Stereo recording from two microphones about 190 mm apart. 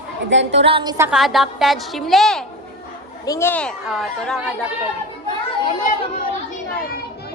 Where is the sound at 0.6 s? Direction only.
25° right (ahead or behind).